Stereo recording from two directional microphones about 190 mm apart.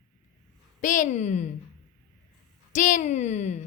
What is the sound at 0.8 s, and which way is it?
Speech, 40° left (ahead or behind).